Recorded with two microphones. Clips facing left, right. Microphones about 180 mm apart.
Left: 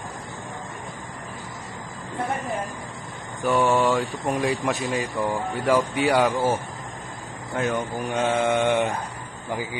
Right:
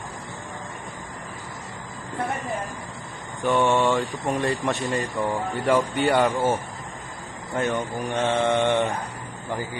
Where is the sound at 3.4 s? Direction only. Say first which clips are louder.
Even; centre (ahead or behind).